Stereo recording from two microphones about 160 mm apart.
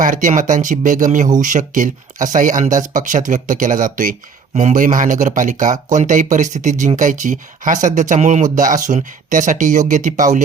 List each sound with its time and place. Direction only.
0.0 s speech: 55° right (ahead or behind)